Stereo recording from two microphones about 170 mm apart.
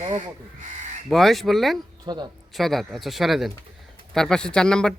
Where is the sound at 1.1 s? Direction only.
Centre (ahead or behind).